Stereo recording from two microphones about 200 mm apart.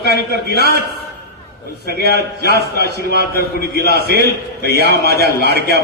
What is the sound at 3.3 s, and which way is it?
Speech, 50° left (ahead or behind).